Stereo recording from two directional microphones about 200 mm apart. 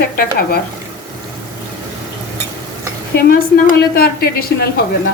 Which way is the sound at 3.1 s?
50° left (ahead or behind).